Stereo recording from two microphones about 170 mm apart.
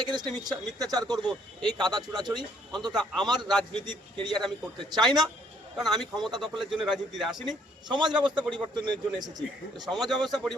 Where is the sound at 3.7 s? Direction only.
25° right (ahead or behind).